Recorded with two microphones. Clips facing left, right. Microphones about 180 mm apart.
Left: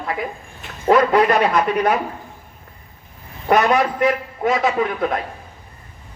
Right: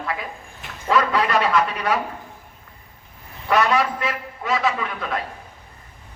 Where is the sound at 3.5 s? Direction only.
40° left (ahead or behind).